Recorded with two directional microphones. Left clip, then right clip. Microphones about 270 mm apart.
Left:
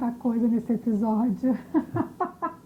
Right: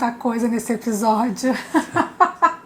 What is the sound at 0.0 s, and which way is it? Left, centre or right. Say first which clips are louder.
A woman's voice: right 6 dB; centre.